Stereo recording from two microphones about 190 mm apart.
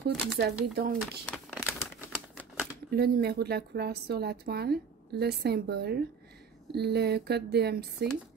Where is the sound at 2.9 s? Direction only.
55° right (ahead or behind).